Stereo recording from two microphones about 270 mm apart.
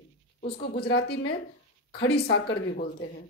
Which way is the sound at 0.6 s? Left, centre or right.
Left.